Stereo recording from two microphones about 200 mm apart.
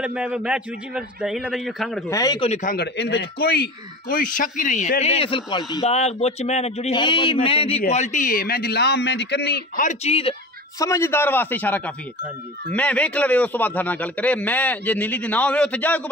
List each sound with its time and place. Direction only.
0.0 s a man's voice: 5° right (ahead or behind)
2.0 s speech: 20° left (ahead or behind)
2.5 s speech: 45° left (ahead or behind); by 5.9 s 20° left (ahead or behind)
5.9 s speech: 30° left (ahead or behind)
7.9 s a man's voice: 35° left (ahead or behind)
10.8 s a man's voice: 15° left (ahead or behind)